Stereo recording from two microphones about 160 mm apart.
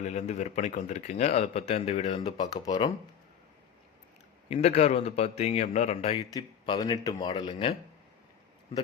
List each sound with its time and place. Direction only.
0.0 s a man's voice: 45° left (ahead or behind); by 2.9 s 30° left (ahead or behind)
4.4 s a man's voice: 45° left (ahead or behind)
6.3 s speech: 25° left (ahead or behind)
7.3 s speech: 35° left (ahead or behind)